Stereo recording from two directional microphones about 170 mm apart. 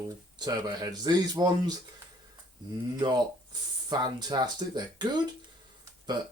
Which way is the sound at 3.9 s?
25° right (ahead or behind).